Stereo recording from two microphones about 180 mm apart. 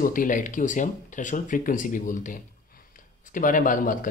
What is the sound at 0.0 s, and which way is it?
Speech, 50° left (ahead or behind).